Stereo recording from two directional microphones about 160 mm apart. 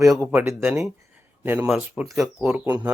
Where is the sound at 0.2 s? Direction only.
10° right (ahead or behind).